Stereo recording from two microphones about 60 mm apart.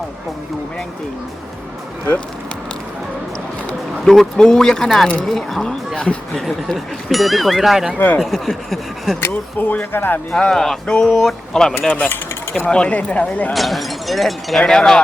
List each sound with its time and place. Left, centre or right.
4.0 s speech: centre
7.9 s speech: left
8.2 s speech: centre
9.2 s speech: left
10.3 s speech: centre
11.9 s speech: left
13.5 s speech: centre